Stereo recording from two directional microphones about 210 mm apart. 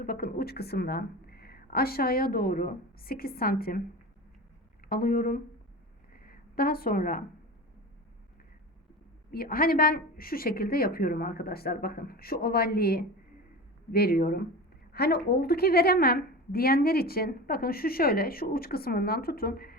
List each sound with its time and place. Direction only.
0.0 s a woman's voice: 45° left (ahead or behind)
4.9 s a woman's voice: 45° left (ahead or behind)
6.1 s a sound: 45° left (ahead or behind)
9.3 s a woman's voice: 45° left (ahead or behind)